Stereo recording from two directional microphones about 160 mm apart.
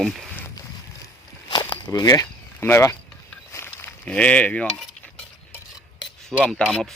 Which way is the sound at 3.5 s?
15° left (ahead or behind).